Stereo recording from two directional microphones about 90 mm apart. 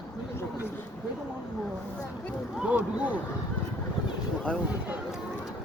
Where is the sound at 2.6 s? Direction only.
15° right (ahead or behind).